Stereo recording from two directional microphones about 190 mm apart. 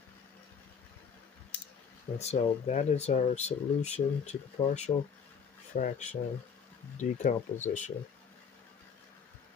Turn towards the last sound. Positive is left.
turn(degrees=40)  # may be behind; listen again after turning